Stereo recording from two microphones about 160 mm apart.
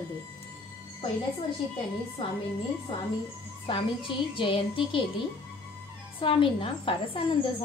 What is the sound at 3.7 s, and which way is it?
A woman's voice, 35° left (ahead or behind).